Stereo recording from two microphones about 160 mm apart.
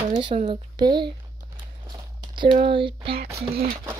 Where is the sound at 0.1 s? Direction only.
30° right (ahead or behind).